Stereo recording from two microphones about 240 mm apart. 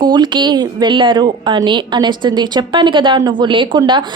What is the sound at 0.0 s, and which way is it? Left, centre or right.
A woman's voice, centre.